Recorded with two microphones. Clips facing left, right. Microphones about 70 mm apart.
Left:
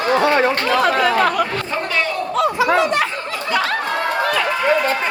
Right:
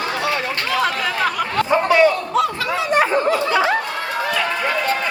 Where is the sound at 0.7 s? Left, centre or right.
Centre.